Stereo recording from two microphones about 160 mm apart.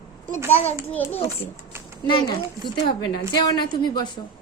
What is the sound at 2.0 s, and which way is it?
A woman's voice, 30° left (ahead or behind).